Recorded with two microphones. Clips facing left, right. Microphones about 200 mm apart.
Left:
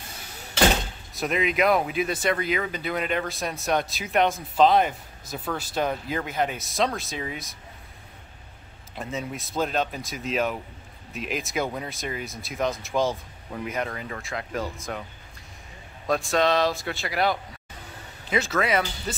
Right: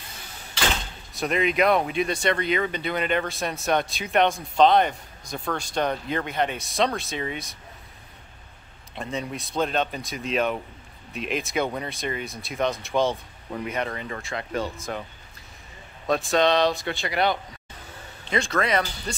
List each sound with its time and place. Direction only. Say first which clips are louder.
1.1 s speech: right 1 dB; centre (ahead or behind)
8.9 s speech: right 1 dB; 5° left (ahead or behind)
16.1 s speech: right 1 dB; centre (ahead or behind)